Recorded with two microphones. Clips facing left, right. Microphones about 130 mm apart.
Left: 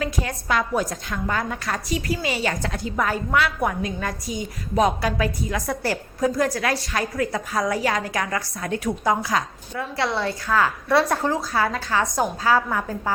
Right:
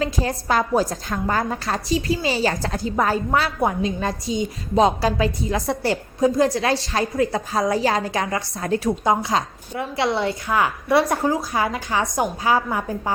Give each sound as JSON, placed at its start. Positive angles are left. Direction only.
{"t": 0.0, "sound": "a woman's voice", "side_deg": -30}
{"t": 11.2, "sound": "speech", "side_deg": 0}
{"t": 11.5, "sound": "a woman's voice", "side_deg": -15}